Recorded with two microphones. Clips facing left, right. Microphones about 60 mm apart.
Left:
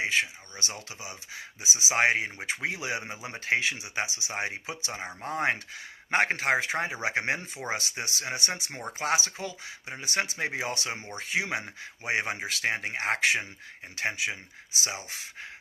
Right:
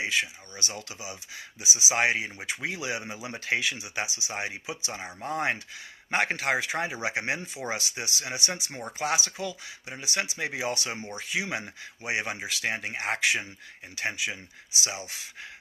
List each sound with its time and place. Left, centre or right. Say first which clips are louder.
0.0 s speech: left 1 dB; left